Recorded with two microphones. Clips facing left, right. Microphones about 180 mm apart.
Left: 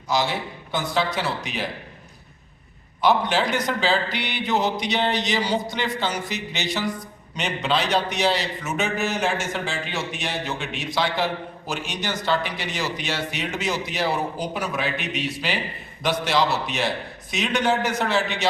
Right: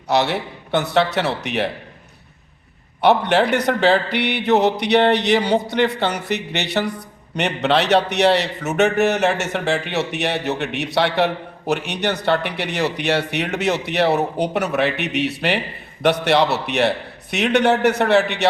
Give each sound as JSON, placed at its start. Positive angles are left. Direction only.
{"t": 0.1, "sound": "a man's voice", "side_deg": -65}
{"t": 3.0, "sound": "a man's voice", "side_deg": -65}